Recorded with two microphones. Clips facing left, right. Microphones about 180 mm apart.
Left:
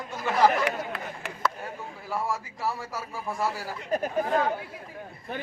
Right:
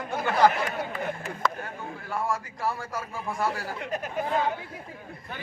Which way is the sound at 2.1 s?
5° left (ahead or behind).